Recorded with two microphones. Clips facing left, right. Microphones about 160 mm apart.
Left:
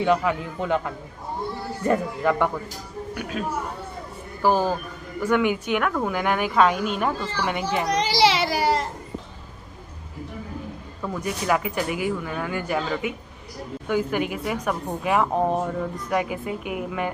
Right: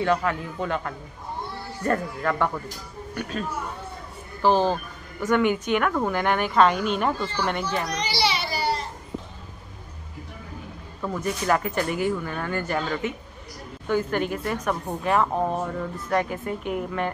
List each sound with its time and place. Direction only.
0.0 s a woman's voice: 15° left (ahead or behind)
7.9 s baby cry: 90° left
11.1 s speech: 5° left (ahead or behind)